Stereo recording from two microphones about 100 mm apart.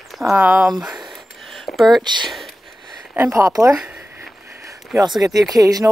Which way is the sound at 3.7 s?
10° right (ahead or behind).